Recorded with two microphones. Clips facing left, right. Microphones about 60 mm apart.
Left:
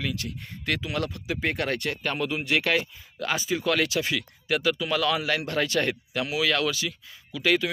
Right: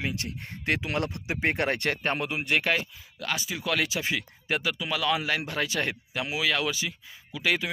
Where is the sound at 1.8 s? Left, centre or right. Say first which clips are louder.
Right 2 dB; right.